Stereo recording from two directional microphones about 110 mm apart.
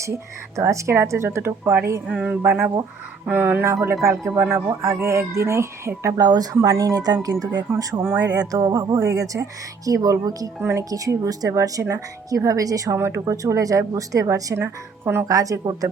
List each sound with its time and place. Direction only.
0.0 s a woman's voice: 25° right (ahead or behind)
2.0 s a sound: 15° right (ahead or behind)
3.2 s a woman's voice: 20° right (ahead or behind)